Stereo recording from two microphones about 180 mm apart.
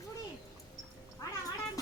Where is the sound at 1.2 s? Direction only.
20° left (ahead or behind).